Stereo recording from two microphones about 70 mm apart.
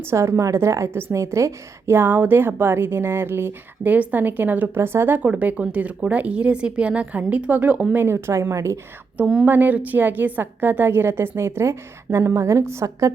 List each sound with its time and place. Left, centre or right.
0.0 s a woman's voice: right
1.9 s a woman's voice: right
4.8 s speech: right
7.9 s a woman's voice: right
9.2 s speech: centre
9.5 s a woman's voice: right